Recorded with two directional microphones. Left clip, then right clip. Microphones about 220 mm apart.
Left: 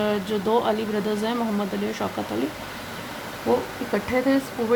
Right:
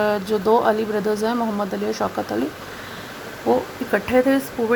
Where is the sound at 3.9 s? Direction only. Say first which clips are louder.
Right 5 dB; 15° right (ahead or behind).